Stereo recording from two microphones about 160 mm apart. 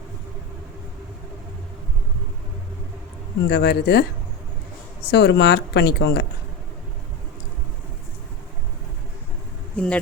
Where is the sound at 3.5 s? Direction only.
90° left.